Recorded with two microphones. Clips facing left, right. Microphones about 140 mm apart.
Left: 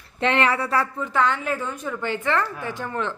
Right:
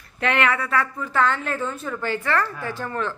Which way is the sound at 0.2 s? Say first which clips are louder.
Left 1 dB; 30° left (ahead or behind).